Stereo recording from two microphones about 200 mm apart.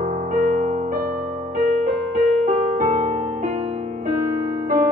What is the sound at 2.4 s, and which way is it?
Music, 35° right (ahead or behind).